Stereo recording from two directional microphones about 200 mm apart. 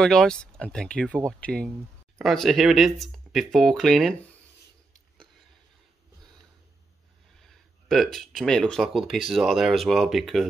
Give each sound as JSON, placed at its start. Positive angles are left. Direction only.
{"t": 0.0, "sound": "speech", "side_deg": 5}
{"t": 7.3, "sound": "speech", "side_deg": 0}